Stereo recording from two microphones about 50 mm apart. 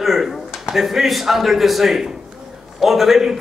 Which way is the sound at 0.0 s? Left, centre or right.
Centre.